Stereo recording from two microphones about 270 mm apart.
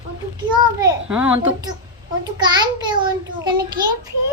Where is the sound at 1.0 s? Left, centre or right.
Centre.